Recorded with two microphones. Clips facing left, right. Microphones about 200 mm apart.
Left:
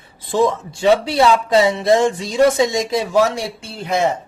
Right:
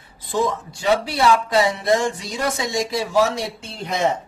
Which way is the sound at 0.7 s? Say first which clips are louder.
Left 5 dB; 25° left (ahead or behind).